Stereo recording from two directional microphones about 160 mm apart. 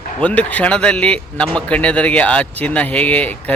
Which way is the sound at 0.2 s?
10° left (ahead or behind).